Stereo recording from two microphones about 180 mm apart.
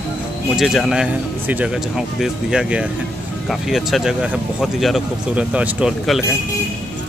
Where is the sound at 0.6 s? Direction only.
Centre (ahead or behind).